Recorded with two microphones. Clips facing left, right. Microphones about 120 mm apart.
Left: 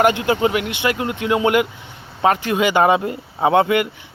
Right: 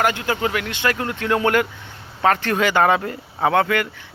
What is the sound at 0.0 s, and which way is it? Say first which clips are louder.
Speech: left 5 dB; 20° left (ahead or behind).